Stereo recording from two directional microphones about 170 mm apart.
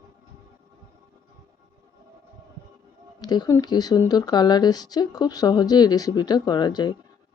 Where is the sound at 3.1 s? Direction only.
25° left (ahead or behind).